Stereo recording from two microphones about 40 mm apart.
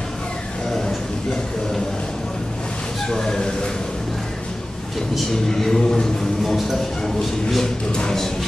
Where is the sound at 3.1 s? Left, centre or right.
Centre.